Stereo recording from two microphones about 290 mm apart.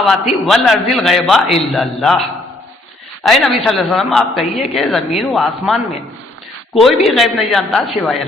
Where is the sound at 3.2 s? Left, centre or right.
Centre.